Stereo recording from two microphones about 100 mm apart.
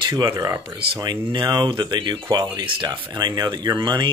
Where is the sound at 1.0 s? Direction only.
50° right (ahead or behind).